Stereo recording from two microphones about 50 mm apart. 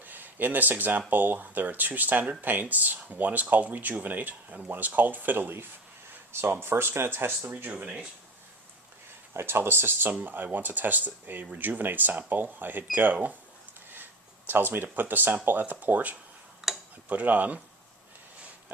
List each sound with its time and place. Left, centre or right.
0.0 s speech: right
6.3 s speech: right
9.3 s speech: right
13.9 s a sound: right
15.4 s speech: right
16.6 s tick-tock: centre
17.1 s speech: right